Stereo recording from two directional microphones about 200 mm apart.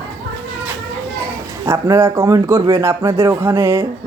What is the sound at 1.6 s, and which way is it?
A man's voice, 15° right (ahead or behind).